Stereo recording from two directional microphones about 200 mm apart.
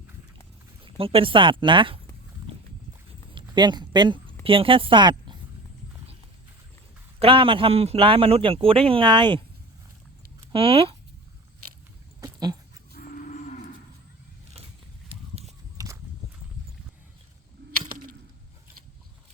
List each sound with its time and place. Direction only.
0.9 s speech: 25° right (ahead or behind)
3.3 s speech: 20° right (ahead or behind)
7.2 s speech: 25° right (ahead or behind)
10.5 s speech: 30° right (ahead or behind)
12.2 s dog: 20° right (ahead or behind)
12.9 s cattle: 45° left (ahead or behind)
15.8 s walk: 15° right (ahead or behind)
17.7 s a sound: 45° right (ahead or behind)